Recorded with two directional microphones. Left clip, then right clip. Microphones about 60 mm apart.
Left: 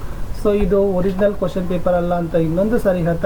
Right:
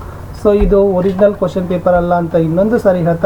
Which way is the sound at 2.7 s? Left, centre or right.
Left.